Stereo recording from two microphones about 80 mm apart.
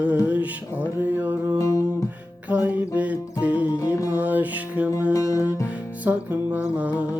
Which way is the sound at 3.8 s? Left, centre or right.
Left.